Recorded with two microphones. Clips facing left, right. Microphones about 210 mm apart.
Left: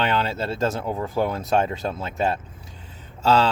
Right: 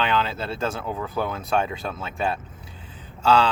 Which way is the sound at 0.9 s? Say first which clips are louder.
Left 3 dB; 25° left (ahead or behind).